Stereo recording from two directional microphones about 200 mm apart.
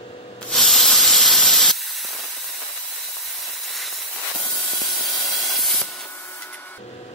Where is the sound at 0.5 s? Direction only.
Centre (ahead or behind).